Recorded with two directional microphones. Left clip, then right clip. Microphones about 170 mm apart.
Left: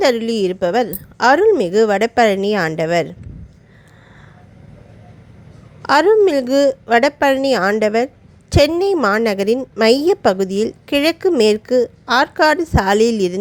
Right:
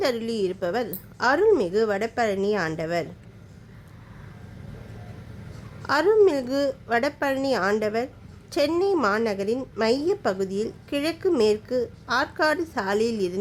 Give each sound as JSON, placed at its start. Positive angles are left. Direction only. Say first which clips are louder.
{"t": 0.0, "sound": "a woman's voice", "louder": "left 9 dB", "side_deg": 35}
{"t": 5.8, "sound": "a woman's voice", "louder": "left 7 dB", "side_deg": 35}